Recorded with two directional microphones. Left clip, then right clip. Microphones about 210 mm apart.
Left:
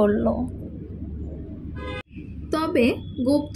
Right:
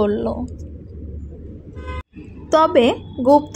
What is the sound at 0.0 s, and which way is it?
Speech, 15° right (ahead or behind).